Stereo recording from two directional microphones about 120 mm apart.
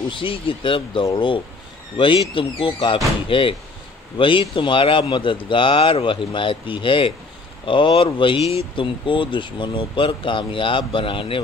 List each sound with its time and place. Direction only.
0.1 s speech: 45° left (ahead or behind)